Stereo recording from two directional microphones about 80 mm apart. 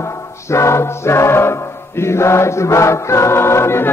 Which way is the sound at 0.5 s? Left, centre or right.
Left.